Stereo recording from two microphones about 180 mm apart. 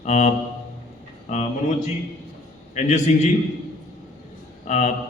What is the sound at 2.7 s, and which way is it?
Speech, 40° left (ahead or behind).